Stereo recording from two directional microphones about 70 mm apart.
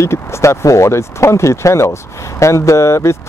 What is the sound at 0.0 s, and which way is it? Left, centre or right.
Speech, left.